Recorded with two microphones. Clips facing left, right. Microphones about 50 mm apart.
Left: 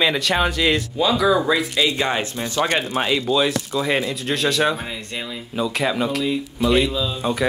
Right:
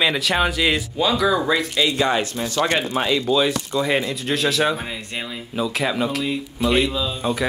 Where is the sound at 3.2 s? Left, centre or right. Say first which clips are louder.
Even; centre.